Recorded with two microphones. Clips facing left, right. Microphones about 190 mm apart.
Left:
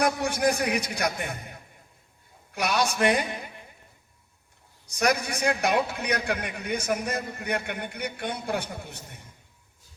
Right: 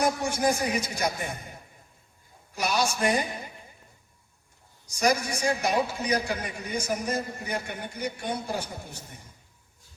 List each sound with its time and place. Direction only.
0.0 s a man's voice: 65° left (ahead or behind)
2.6 s a man's voice: 60° left (ahead or behind)
4.9 s a man's voice: 60° left (ahead or behind)